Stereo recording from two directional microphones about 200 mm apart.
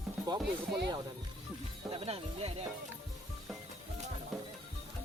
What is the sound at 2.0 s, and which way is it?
Speech, 30° right (ahead or behind).